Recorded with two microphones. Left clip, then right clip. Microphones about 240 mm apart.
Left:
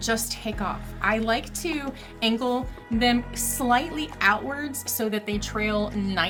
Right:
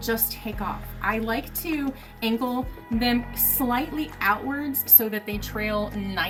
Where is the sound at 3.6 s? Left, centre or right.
Left.